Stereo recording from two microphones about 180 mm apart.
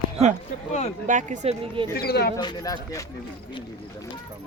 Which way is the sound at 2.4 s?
20° left (ahead or behind).